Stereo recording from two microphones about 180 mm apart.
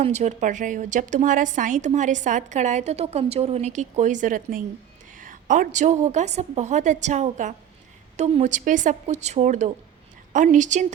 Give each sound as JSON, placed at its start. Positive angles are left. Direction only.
{"t": 0.0, "sound": "a woman's voice", "side_deg": -40}